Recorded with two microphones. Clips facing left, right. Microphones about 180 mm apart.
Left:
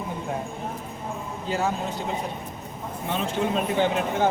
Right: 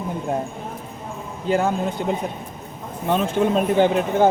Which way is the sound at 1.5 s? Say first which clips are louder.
Right 6 dB; 55° right (ahead or behind).